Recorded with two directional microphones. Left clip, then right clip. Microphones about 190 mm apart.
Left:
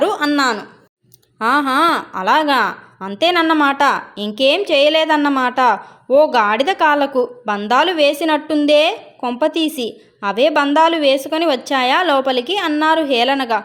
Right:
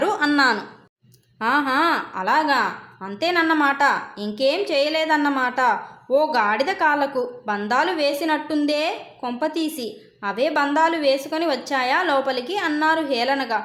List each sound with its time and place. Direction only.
0.0 s a woman's voice: 20° left (ahead or behind); by 13.7 s 35° left (ahead or behind)